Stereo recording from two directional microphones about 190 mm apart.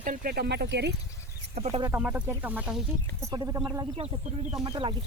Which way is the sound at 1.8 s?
10° right (ahead or behind).